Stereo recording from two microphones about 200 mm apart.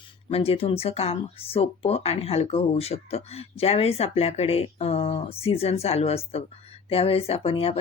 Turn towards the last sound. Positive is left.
turn(degrees=30)  # may be behind; listen again after turning